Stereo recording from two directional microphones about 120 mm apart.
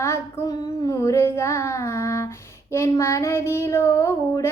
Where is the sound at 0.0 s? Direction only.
25° left (ahead or behind).